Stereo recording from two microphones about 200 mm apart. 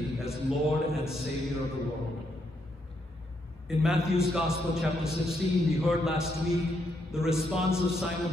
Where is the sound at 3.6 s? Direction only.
Centre (ahead or behind).